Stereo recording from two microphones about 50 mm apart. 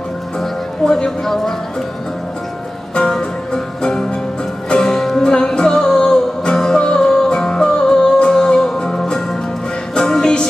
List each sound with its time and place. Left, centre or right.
0.4 s music: centre
2.9 s music: centre